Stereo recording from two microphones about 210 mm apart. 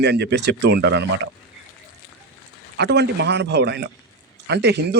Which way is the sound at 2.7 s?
55° right (ahead or behind).